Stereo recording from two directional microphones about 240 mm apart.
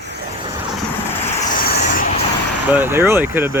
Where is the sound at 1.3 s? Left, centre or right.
Left.